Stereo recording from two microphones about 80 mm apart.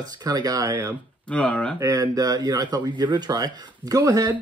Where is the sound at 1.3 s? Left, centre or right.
Centre.